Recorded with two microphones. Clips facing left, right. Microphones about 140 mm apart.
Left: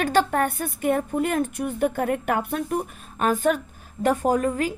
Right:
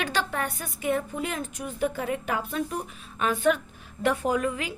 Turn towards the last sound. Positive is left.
turn(degrees=45)  # may be behind; listen again after turning